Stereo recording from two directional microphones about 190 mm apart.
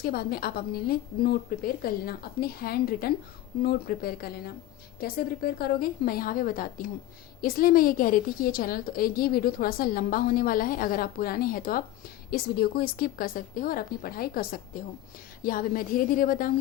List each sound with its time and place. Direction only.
0.0 s a woman's voice: 55° left (ahead or behind)